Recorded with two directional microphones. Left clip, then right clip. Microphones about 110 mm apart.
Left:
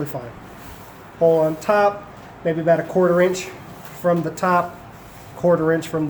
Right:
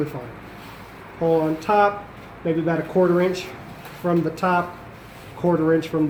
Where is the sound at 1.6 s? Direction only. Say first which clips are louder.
Right 2 dB; 90° left.